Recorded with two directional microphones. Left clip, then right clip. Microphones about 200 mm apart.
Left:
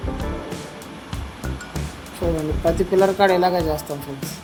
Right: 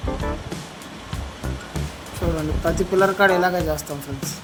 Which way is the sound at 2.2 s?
Centre (ahead or behind).